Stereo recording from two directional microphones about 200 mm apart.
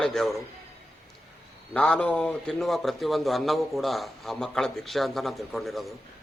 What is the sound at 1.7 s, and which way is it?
A man's voice, 5° left (ahead or behind).